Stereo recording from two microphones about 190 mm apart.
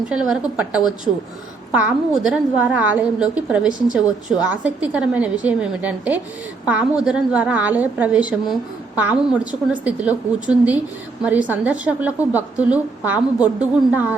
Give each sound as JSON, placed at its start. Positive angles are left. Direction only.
{"t": 0.1, "sound": "a woman's voice", "side_deg": -5}